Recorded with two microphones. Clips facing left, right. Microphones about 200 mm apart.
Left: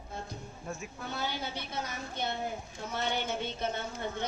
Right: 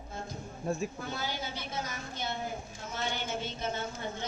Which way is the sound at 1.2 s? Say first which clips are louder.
Left 1 dB; 60° left (ahead or behind).